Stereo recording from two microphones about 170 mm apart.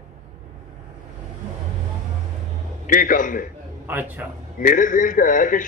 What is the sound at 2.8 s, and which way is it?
Speech, 50° left (ahead or behind).